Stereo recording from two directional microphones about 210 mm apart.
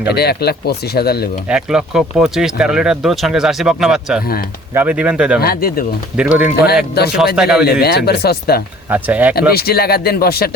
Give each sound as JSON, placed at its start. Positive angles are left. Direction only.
{"t": 0.1, "sound": "speech", "side_deg": 50}
{"t": 1.5, "sound": "speech", "side_deg": -5}
{"t": 5.4, "sound": "speech", "side_deg": 45}
{"t": 6.1, "sound": "speech", "side_deg": -5}
{"t": 6.9, "sound": "speech", "side_deg": 50}
{"t": 7.3, "sound": "speech", "side_deg": -5}
{"t": 7.6, "sound": "speech", "side_deg": 50}
{"t": 8.9, "sound": "speech", "side_deg": -5}
{"t": 9.5, "sound": "speech", "side_deg": 45}